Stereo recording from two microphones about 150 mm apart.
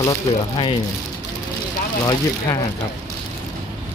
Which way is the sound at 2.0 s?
25° left (ahead or behind).